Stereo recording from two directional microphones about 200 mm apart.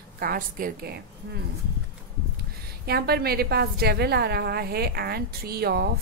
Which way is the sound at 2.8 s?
50° right (ahead or behind).